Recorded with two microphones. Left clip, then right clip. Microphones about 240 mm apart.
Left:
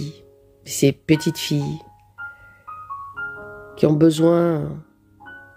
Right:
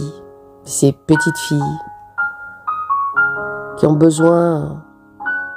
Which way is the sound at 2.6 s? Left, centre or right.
Right.